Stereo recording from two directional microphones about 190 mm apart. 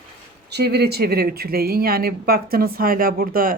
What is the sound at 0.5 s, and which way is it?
Speech, 60° right (ahead or behind).